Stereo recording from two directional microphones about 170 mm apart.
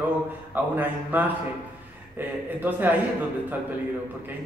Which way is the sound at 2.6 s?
10° right (ahead or behind).